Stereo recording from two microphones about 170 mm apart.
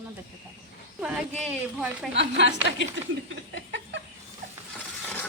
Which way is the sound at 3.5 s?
90° right.